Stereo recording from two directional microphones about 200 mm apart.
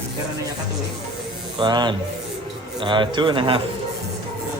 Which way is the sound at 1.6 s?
20° right (ahead or behind).